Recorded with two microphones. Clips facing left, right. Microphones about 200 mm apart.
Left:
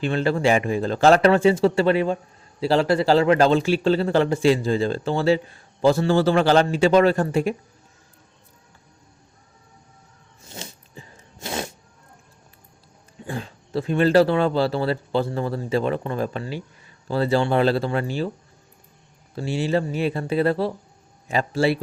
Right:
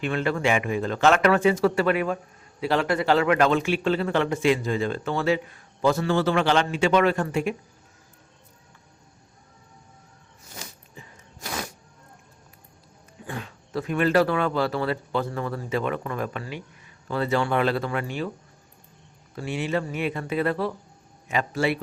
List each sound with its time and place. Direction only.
0.0 s speech: 30° left (ahead or behind)
10.4 s a sound: 25° left (ahead or behind)
13.2 s speech: 30° left (ahead or behind)
19.4 s speech: 30° left (ahead or behind)